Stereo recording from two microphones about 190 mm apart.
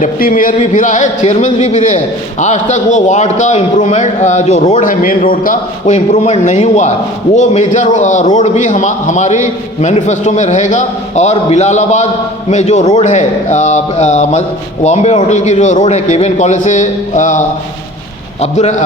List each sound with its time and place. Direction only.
0.0 s a man's voice: 45° left (ahead or behind)
18.5 s a man's voice: 35° left (ahead or behind)